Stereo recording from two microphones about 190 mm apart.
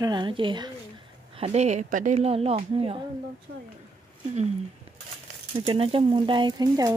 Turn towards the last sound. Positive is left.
turn(degrees=-20)  # may be behind; listen again after turning